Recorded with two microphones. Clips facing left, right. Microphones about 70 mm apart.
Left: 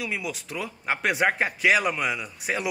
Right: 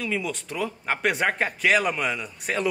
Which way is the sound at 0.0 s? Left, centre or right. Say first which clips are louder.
Right 3 dB; centre.